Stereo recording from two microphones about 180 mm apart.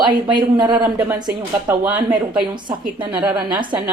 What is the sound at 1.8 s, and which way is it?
Speech, 25° right (ahead or behind).